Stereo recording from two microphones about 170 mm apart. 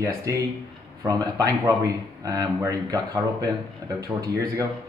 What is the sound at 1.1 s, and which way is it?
A man's voice, 20° right (ahead or behind).